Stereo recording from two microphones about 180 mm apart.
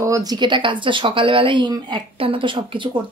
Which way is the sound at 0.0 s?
20° right (ahead or behind).